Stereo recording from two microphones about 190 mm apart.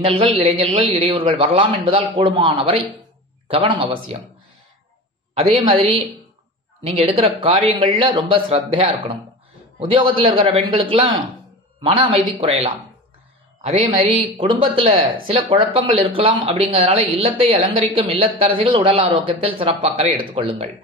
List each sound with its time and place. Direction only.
0.0 s a woman's voice: 30° right (ahead or behind)
5.3 s a man's voice: 30° right (ahead or behind)